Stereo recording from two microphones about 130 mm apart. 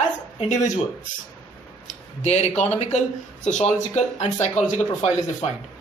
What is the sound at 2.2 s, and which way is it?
Speech, 55° left (ahead or behind).